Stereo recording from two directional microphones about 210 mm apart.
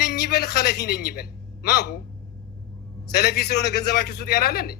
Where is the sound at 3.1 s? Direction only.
50° left (ahead or behind).